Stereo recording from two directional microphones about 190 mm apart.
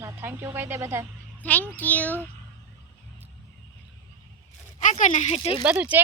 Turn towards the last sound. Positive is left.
turn(degrees=-10)  # may be behind; listen again after turning